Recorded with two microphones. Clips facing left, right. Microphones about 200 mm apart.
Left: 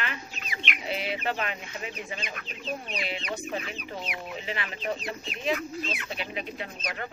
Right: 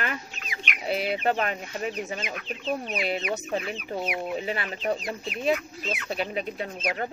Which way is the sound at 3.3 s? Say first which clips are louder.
Right 4 dB; 35° right (ahead or behind).